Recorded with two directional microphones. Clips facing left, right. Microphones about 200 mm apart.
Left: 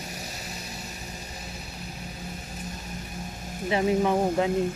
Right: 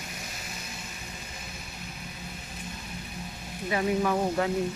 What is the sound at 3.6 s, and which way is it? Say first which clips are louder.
Speech: left 3 dB; 25° left (ahead or behind).